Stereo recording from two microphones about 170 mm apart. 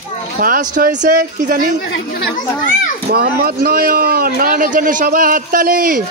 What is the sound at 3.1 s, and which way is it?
Speech, 65° right (ahead or behind).